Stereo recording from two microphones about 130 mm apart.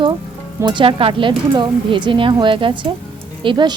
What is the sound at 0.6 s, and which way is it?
A woman's voice, 35° right (ahead or behind).